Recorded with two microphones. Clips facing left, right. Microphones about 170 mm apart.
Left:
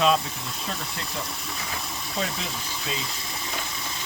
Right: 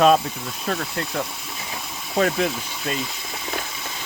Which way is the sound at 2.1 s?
65° right (ahead or behind).